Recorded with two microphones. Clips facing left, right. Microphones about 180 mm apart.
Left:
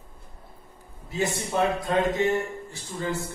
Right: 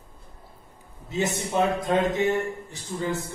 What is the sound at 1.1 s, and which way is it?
Speech, 20° right (ahead or behind).